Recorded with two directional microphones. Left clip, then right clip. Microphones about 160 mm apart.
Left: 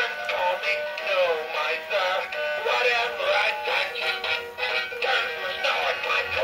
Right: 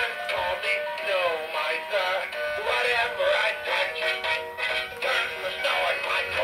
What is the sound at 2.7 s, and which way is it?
Music, 20° right (ahead or behind).